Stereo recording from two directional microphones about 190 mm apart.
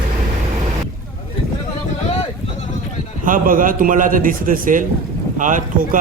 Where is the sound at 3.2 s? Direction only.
45° right (ahead or behind).